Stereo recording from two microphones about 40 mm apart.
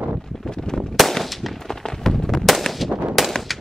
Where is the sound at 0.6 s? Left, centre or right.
Centre.